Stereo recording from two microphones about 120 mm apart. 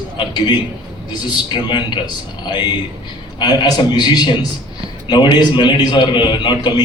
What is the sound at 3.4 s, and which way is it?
A man's voice, 35° left (ahead or behind).